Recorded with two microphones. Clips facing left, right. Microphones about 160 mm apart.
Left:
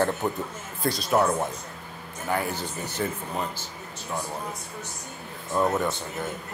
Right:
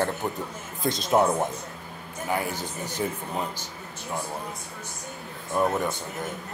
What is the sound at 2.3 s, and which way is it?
Speech, 10° right (ahead or behind).